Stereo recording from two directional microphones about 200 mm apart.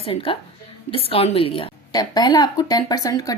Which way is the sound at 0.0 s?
25° left (ahead or behind).